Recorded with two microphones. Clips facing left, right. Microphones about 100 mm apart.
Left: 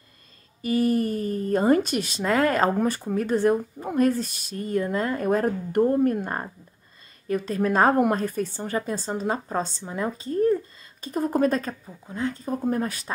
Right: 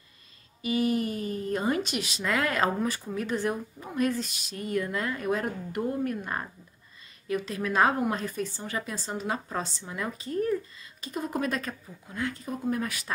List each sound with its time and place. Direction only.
0.6 s speech: 45° left (ahead or behind)